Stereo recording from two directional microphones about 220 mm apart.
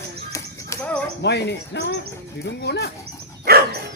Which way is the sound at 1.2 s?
50° left (ahead or behind).